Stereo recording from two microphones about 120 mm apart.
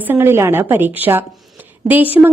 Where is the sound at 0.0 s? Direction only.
20° right (ahead or behind).